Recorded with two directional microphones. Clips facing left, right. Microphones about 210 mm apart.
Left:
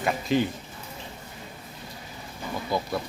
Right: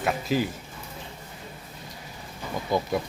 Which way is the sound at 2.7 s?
20° right (ahead or behind).